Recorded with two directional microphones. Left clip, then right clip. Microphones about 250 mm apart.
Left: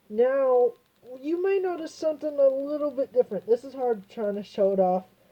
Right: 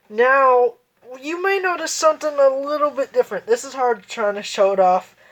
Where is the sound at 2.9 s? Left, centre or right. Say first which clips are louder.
Right 5 dB; right.